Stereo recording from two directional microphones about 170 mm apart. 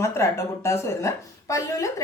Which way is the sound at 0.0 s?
15° left (ahead or behind).